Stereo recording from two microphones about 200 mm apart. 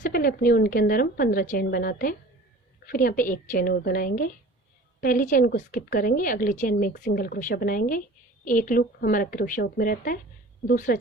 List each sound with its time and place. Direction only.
0.0 s a woman's voice: 45° left (ahead or behind)